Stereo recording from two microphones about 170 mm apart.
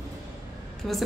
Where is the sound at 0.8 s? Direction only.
Centre (ahead or behind).